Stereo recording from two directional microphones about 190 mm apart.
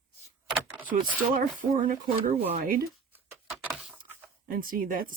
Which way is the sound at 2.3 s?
35° right (ahead or behind).